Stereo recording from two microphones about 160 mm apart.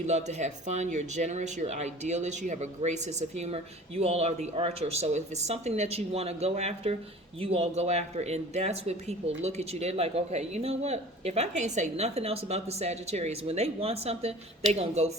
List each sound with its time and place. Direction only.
0.0 s speech: 45° right (ahead or behind)